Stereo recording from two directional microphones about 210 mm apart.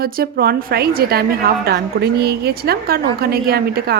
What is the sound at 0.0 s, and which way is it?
A woman's voice, 45° right (ahead or behind).